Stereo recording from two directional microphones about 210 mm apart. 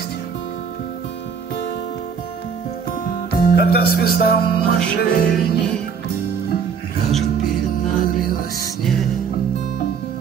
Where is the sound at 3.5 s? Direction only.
50° left (ahead or behind).